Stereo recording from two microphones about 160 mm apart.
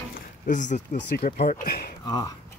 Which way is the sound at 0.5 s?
50° left (ahead or behind).